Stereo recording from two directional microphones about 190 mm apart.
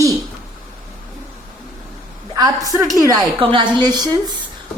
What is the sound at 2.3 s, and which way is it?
A woman's voice, 20° right (ahead or behind).